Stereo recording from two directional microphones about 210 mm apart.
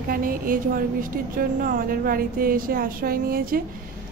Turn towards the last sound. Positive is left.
turn(degrees=-45)  # may be behind; listen again after turning